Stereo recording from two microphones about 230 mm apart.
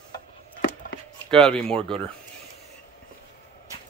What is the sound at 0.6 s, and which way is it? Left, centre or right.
Chop, left.